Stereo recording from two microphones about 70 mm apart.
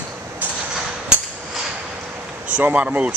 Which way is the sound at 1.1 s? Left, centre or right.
Centre.